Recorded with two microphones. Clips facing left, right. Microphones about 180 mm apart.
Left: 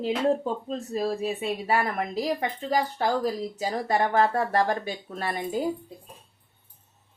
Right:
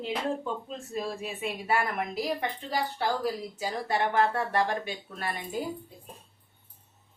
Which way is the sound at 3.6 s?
40° left (ahead or behind).